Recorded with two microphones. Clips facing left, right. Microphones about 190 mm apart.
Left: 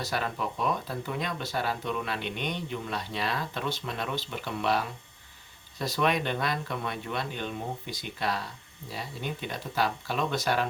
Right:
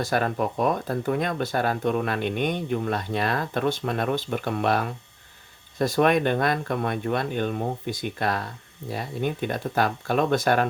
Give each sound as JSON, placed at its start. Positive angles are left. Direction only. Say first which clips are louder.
{"t": 0.0, "sound": "speech", "louder": "right 7 dB", "side_deg": -50}